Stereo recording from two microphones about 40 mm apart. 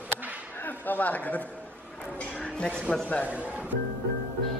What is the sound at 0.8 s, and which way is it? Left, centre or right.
Speech, left.